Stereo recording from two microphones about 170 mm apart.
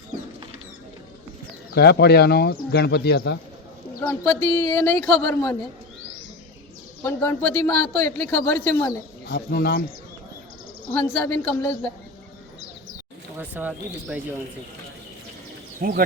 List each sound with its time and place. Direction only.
1.7 s speech: 70° left (ahead or behind)
4.1 s a man's voice: 15° left (ahead or behind)
7.0 s a man's voice: 15° left (ahead or behind)
9.3 s speech: 75° left (ahead or behind)
10.9 s a man's voice: 10° left (ahead or behind)
13.3 s speech: 10° right (ahead or behind)
15.8 s speech: 60° right (ahead or behind)